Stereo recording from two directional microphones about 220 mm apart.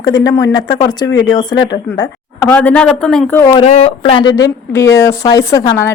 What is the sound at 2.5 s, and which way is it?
Speech, 5° left (ahead or behind).